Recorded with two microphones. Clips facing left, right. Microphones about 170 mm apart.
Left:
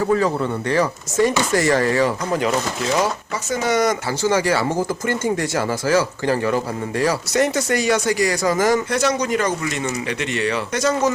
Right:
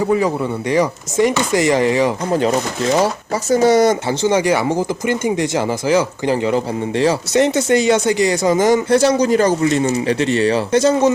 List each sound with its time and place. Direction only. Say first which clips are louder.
0.0 s speech: right 2 dB; 15° right (ahead or behind)